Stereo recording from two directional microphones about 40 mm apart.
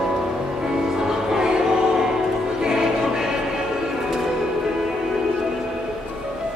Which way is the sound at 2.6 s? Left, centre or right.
Centre.